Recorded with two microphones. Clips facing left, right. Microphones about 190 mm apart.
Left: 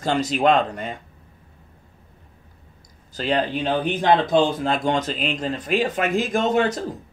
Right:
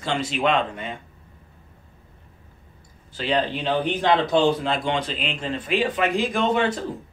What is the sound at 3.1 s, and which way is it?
Speech, 45° left (ahead or behind).